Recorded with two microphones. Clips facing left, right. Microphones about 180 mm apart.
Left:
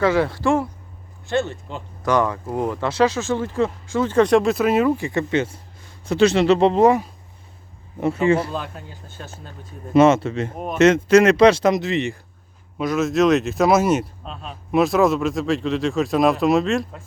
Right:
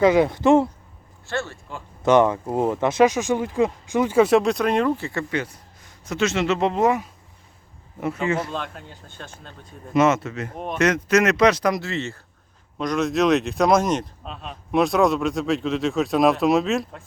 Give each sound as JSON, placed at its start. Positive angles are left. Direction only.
{"t": 0.0, "sound": "speech", "side_deg": -20}
{"t": 1.3, "sound": "speech", "side_deg": 20}
{"t": 2.0, "sound": "speech", "side_deg": -20}
{"t": 8.5, "sound": "speech", "side_deg": 5}
{"t": 9.9, "sound": "speech", "side_deg": 30}
{"t": 10.5, "sound": "speech", "side_deg": 5}
{"t": 10.8, "sound": "speech", "side_deg": 25}
{"t": 12.8, "sound": "speech", "side_deg": 5}